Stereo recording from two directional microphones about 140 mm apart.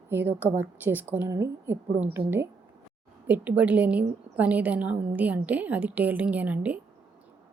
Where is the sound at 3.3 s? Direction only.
10° right (ahead or behind).